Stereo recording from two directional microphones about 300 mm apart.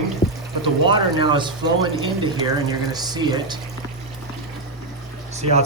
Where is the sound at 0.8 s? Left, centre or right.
Centre.